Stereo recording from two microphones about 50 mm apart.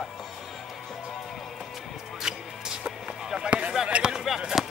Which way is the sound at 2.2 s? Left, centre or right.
Centre.